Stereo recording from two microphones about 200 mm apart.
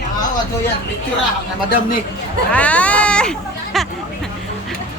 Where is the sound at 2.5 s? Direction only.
5° left (ahead or behind).